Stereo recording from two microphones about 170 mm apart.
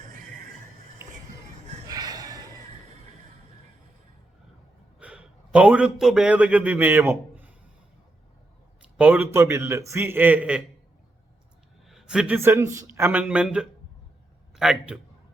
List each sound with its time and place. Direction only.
1.0 s music: 15° right (ahead or behind)
1.9 s a sound: 20° right (ahead or behind)
4.9 s a man's voice: 5° right (ahead or behind)
9.0 s a man's voice: 10° right (ahead or behind)
11.9 s a sound: 5° right (ahead or behind)
12.4 s a man's voice: 15° right (ahead or behind)